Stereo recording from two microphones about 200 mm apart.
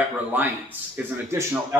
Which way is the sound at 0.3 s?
10° right (ahead or behind).